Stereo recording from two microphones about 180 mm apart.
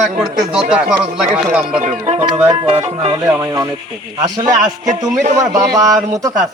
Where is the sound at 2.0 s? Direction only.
35° right (ahead or behind).